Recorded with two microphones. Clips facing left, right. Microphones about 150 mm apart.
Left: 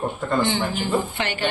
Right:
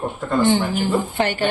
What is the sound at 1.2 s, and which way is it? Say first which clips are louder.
Speech: right 6 dB; 45° right (ahead or behind).